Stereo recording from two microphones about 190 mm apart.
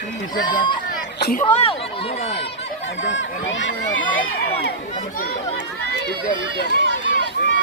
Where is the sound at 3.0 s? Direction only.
75° left (ahead or behind).